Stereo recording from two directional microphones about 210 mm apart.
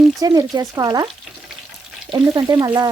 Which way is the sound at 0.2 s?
20° right (ahead or behind).